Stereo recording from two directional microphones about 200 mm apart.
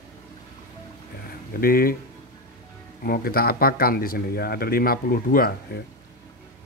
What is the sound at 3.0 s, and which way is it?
Speech, 50° left (ahead or behind).